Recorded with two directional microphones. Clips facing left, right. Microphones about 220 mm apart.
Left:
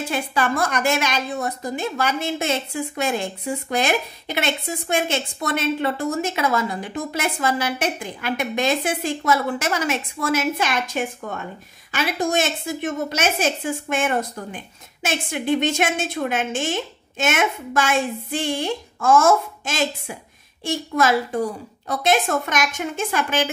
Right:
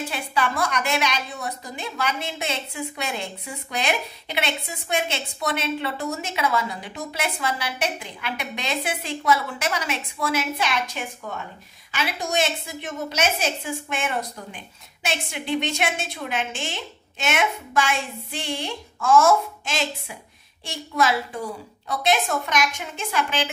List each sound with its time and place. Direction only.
0.1 s a woman's voice: 45° left (ahead or behind)